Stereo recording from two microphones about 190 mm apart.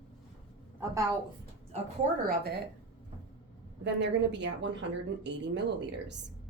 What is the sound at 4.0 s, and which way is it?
Speech, 70° right (ahead or behind).